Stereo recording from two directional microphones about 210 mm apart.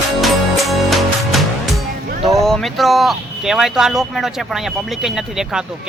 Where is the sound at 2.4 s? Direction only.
Centre (ahead or behind).